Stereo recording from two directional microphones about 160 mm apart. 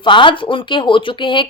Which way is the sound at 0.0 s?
30° left (ahead or behind).